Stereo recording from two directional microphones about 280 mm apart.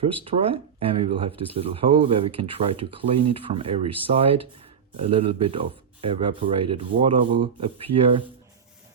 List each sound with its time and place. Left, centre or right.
0.3 s speech: centre